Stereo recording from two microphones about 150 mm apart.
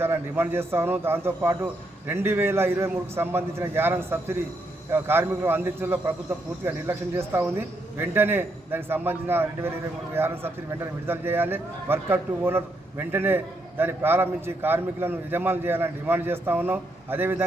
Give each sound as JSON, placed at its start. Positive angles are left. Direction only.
{"t": 0.0, "sound": "a man's voice", "side_deg": -15}